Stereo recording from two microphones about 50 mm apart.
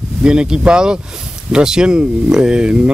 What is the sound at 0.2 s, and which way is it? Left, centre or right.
Speech, centre.